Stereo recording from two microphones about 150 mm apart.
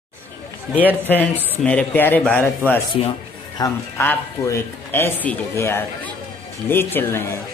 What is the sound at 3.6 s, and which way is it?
Speech, 25° left (ahead or behind).